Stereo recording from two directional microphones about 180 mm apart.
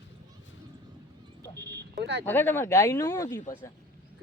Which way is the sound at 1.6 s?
65° right (ahead or behind).